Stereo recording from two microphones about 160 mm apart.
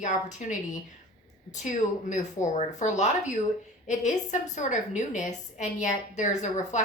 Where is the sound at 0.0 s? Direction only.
50° left (ahead or behind).